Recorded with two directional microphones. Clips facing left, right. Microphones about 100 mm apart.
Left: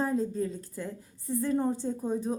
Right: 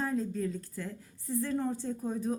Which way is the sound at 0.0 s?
30° left (ahead or behind).